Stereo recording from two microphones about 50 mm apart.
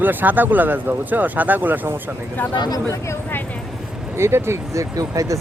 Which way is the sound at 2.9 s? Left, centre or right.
Left.